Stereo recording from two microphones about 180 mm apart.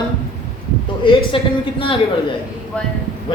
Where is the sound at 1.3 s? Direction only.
30° left (ahead or behind).